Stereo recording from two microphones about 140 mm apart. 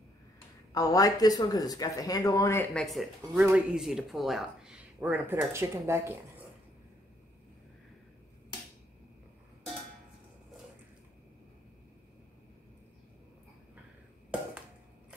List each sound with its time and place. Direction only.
0.7 s speech: 25° left (ahead or behind)
2.7 s speech: centre (ahead or behind); by 6.4 s 20° right (ahead or behind)